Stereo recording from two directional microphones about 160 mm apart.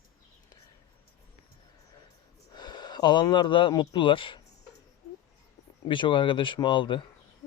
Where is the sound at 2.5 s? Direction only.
25° left (ahead or behind).